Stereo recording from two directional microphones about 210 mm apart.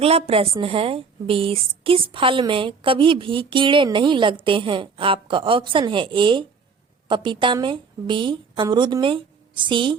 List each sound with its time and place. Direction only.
0.0 s a woman's voice: 30° right (ahead or behind)